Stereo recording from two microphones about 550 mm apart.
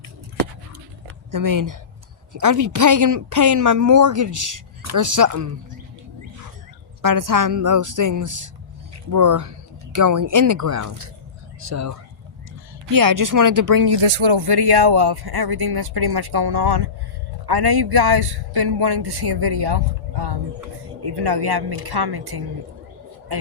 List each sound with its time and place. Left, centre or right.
1.3 s speech: right
7.0 s speech: right
14.1 s speech: right